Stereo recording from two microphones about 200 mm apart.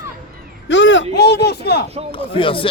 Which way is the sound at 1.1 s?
55° left (ahead or behind).